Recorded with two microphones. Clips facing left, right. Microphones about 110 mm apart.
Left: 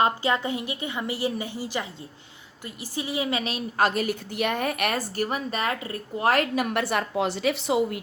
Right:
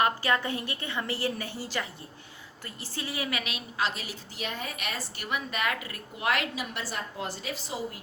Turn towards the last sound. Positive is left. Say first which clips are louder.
# left 11 dB
turn(degrees=70)  # may be behind; listen again after turning